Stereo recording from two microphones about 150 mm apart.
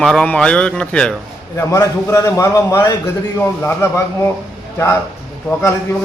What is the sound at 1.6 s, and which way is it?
A man's voice, 20° left (ahead or behind).